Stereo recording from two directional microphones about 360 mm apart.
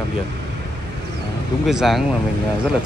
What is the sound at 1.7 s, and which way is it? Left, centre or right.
Speech, centre.